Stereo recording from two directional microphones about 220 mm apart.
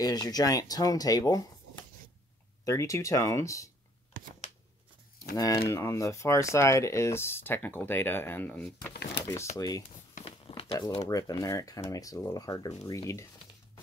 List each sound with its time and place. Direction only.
0.0 s speech: 15° left (ahead or behind)
2.6 s speech: 15° left (ahead or behind)
5.3 s speech: 15° left (ahead or behind)
8.9 s speech: 50° left (ahead or behind)
9.6 s speech: 15° left (ahead or behind)
10.1 s a sound: 25° left (ahead or behind)
11.1 s speech: 15° left (ahead or behind)